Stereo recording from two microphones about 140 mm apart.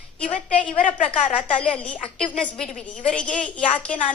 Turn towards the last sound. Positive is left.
turn(degrees=10)  # may be behind; listen again after turning